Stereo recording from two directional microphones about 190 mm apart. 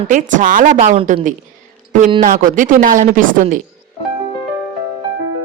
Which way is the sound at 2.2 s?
45° right (ahead or behind).